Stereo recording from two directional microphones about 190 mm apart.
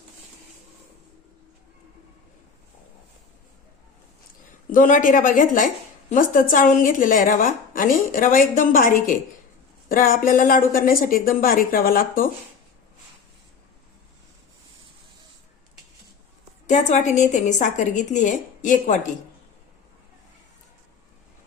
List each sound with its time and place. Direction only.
4.7 s a woman's voice: 45° left (ahead or behind)
16.6 s a woman's voice: 40° left (ahead or behind)